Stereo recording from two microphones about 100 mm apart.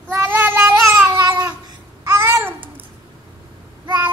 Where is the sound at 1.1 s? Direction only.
40° right (ahead or behind).